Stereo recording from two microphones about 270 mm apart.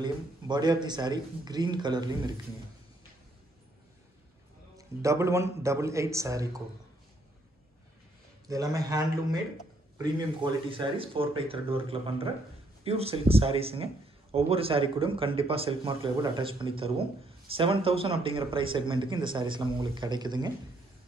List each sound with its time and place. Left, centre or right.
0.0 s speech: centre
4.7 s speech: centre
8.5 s speech: centre